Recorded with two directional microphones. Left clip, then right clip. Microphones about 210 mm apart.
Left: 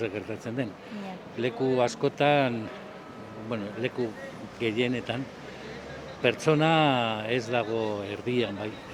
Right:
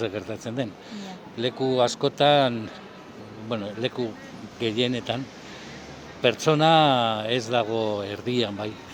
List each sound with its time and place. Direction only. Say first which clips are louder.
0.0 s speech: right 3 dB; 25° right (ahead or behind)
6.2 s speech: right 4 dB; 25° right (ahead or behind)